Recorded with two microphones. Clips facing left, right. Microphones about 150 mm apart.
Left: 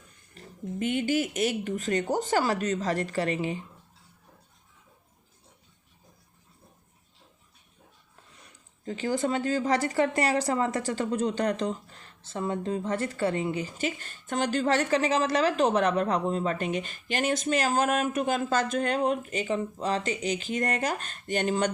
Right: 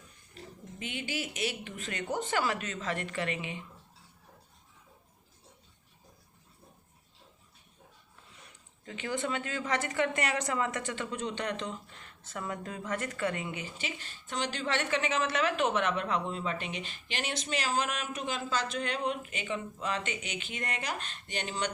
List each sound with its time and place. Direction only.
0.8 s speech: 50° left (ahead or behind)
8.8 s speech: 35° left (ahead or behind)